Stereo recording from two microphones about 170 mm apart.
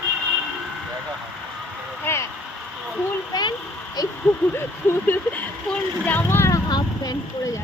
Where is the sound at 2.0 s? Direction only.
15° left (ahead or behind).